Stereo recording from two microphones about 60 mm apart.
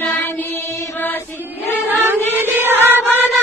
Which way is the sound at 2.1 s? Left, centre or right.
Right.